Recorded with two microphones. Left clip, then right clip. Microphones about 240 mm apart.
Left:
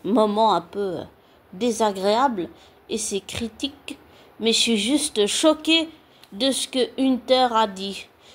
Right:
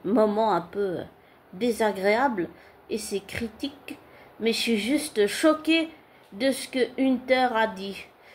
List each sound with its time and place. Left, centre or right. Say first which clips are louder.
0.0 s speech: left 4 dB; left